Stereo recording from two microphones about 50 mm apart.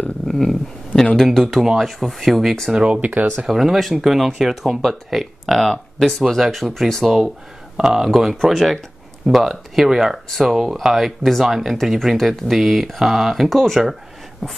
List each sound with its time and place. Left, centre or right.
0.3 s a sound: centre
1.1 s speech: centre
2.7 s speech: centre
3.0 s speech: right
3.4 s speech: centre
7.2 s speech: centre